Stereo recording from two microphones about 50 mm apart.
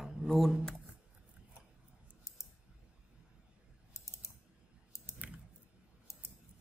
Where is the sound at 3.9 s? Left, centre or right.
Left.